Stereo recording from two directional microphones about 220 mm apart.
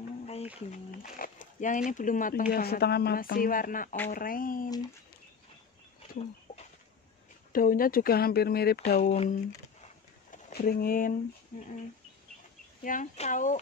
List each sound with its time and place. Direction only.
0.6 s speech: 35° left (ahead or behind)
4.6 s speech: 15° left (ahead or behind)
7.5 s speech: 40° left (ahead or behind)
8.9 s speech: 30° left (ahead or behind)
10.3 s speech: 40° left (ahead or behind)
12.8 s speech: 35° left (ahead or behind)